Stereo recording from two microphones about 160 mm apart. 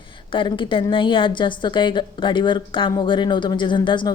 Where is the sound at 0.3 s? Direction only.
30° left (ahead or behind).